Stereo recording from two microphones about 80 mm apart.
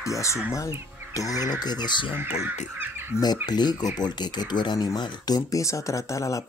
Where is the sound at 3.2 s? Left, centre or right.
Left.